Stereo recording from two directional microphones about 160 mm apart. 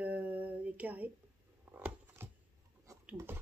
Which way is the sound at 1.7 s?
10° right (ahead or behind).